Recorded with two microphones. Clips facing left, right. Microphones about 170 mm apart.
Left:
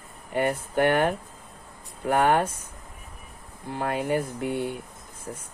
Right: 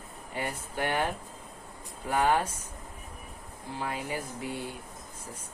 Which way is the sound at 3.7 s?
55° left (ahead or behind).